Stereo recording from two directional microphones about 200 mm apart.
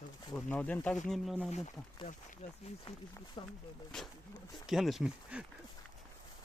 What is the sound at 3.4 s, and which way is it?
Speech, 20° left (ahead or behind).